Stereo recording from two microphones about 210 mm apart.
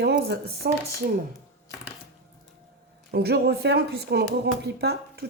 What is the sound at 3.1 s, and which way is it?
Speech, 50° right (ahead or behind).